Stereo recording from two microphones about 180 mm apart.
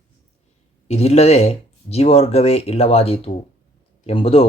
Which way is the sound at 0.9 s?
35° left (ahead or behind).